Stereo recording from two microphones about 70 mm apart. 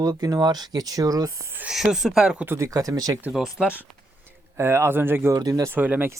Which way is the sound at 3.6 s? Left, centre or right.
Centre.